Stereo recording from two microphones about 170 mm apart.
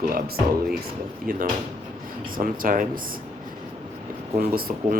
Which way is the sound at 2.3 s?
55° right (ahead or behind).